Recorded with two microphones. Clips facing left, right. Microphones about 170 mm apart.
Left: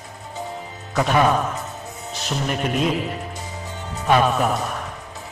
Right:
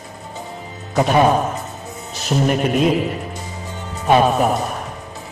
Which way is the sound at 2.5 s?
10° right (ahead or behind).